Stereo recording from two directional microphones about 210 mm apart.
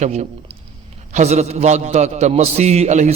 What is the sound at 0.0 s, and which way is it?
A man's voice, 30° right (ahead or behind).